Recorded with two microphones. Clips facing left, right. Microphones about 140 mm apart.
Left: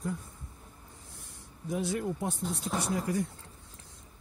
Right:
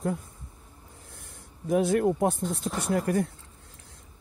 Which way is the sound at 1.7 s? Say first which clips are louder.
Right 9 dB; 55° right (ahead or behind).